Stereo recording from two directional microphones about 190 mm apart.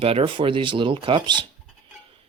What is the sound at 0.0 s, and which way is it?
Speech, 30° right (ahead or behind).